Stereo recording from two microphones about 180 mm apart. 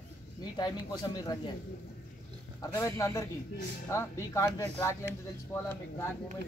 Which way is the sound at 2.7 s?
15° left (ahead or behind).